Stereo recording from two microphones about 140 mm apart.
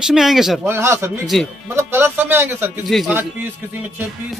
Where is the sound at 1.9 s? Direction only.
15° right (ahead or behind).